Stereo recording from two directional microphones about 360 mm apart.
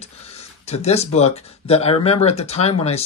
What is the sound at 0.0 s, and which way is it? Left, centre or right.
Speech, centre.